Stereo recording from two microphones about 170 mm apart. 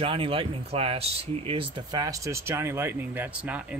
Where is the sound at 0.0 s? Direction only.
35° right (ahead or behind).